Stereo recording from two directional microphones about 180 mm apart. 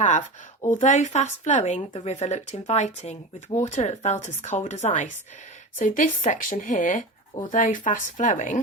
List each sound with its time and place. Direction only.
0.0 s speech: 40° left (ahead or behind)